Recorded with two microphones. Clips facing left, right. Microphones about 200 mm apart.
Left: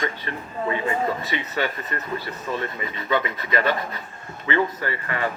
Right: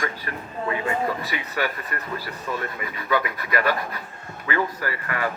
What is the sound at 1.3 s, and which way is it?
Speech, 25° left (ahead or behind).